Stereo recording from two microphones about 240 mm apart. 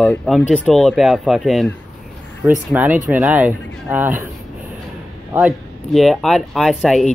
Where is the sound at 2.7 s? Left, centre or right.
Centre.